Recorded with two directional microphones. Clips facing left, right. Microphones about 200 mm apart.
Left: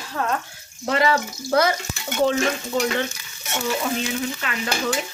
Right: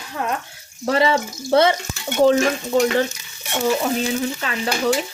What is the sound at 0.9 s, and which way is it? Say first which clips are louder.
Stir: right 2 dB; 25° right (ahead or behind).